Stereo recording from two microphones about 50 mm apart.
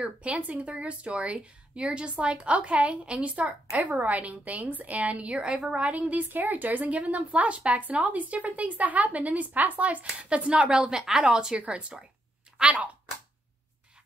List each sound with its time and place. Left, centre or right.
0.0 s speech: right